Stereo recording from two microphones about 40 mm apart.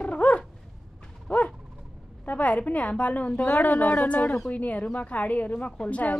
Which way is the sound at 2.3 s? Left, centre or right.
Left.